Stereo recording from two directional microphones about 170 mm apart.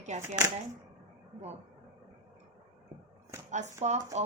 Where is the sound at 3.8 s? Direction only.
45° right (ahead or behind).